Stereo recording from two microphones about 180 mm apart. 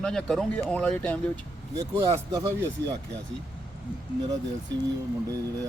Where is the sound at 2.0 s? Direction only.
20° right (ahead or behind).